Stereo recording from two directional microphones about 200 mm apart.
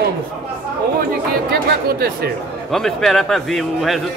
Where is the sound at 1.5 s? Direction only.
50° right (ahead or behind).